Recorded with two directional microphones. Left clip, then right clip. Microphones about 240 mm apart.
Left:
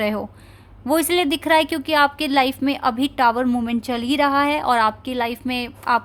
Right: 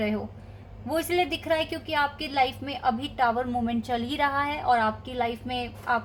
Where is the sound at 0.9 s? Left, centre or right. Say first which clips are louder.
Left 6 dB; left.